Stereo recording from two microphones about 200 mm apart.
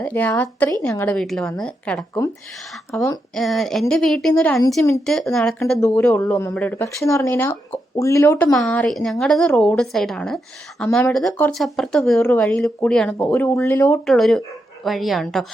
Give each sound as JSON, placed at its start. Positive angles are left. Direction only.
{"t": 0.0, "sound": "speech", "side_deg": 10}
{"t": 11.1, "sound": "speech", "side_deg": 0}
{"t": 14.0, "sound": "speech", "side_deg": 0}